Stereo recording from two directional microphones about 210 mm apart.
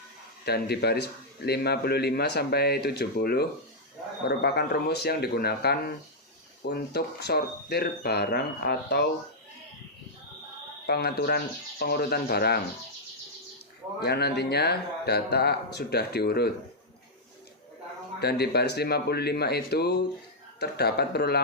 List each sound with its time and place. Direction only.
0.4 s a man's voice: 50° left (ahead or behind)
10.8 s a man's voice: 50° left (ahead or behind)
14.0 s a man's voice: 50° left (ahead or behind)
18.2 s a man's voice: 50° left (ahead or behind)